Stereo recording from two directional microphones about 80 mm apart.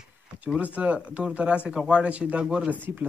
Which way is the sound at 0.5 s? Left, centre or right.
Centre.